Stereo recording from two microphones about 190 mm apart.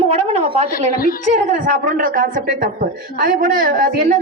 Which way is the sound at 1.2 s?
40° right (ahead or behind).